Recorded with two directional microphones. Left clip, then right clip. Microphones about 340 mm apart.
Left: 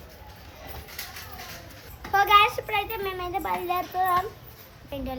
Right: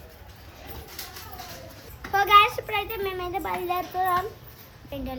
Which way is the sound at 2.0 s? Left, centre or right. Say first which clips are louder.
Right 1 dB; centre.